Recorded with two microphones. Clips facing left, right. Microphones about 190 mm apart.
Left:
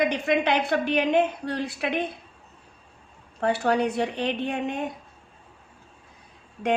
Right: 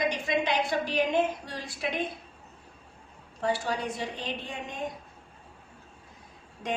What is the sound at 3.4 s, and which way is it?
A woman's voice, 65° left (ahead or behind).